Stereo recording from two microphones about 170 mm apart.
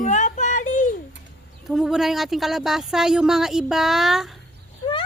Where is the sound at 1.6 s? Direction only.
Centre (ahead or behind).